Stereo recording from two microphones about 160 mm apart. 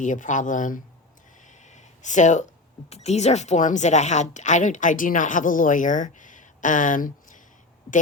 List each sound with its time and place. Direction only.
0.0 s speech: 50° left (ahead or behind)
1.5 s a sound: 50° left (ahead or behind)
2.9 s speech: 45° left (ahead or behind)